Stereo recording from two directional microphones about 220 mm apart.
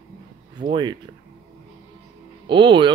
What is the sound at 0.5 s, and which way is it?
Speech, 20° right (ahead or behind).